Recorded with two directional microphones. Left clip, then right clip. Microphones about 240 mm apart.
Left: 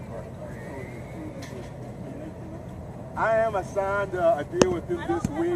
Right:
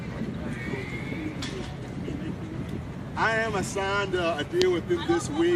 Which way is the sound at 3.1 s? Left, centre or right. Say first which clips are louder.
Left 2 dB; right.